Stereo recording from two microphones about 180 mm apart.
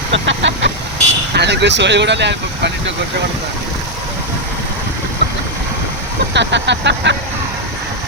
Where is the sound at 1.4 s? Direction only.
70° right (ahead or behind).